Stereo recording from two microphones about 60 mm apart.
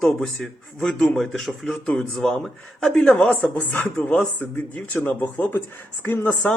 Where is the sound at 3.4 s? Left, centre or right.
Left.